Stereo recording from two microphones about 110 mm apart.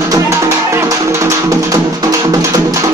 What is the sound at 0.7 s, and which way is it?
Music, 25° right (ahead or behind).